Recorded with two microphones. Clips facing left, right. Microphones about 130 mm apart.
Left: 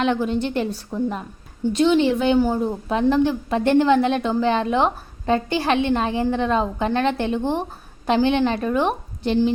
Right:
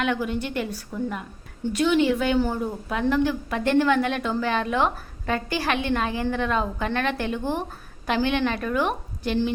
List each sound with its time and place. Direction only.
0.0 s a woman's voice: 30° left (ahead or behind)